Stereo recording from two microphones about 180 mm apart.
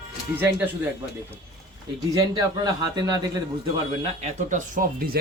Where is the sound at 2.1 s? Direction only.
20° right (ahead or behind).